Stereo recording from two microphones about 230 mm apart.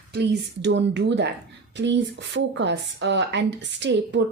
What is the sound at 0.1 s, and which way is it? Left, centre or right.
Speech, right.